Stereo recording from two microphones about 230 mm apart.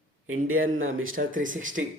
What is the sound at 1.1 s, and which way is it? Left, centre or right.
Speech, right.